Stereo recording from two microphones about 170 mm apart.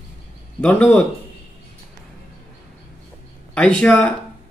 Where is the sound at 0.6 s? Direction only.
5° left (ahead or behind).